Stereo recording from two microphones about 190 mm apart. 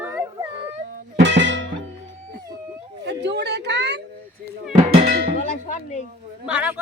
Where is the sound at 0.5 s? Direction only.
30° right (ahead or behind).